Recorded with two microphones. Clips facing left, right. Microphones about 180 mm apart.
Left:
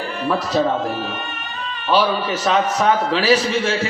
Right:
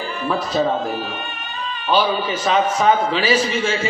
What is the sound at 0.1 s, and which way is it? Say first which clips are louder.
A man's voice: left 2 dB; 70° left (ahead or behind).